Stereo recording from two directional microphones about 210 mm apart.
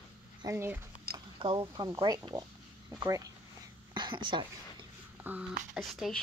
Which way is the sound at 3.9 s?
20° right (ahead or behind).